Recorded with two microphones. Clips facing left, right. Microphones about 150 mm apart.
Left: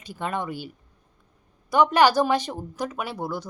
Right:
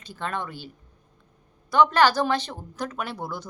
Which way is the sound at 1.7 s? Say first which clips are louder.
Left 1 dB; 15° left (ahead or behind).